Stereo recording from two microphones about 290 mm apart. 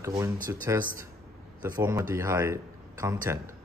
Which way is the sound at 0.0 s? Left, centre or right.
Centre.